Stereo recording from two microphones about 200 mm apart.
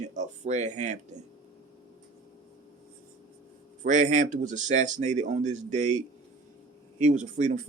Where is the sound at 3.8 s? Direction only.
40° right (ahead or behind).